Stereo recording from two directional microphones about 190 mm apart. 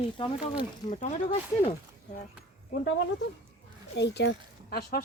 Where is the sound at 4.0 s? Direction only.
65° left (ahead or behind).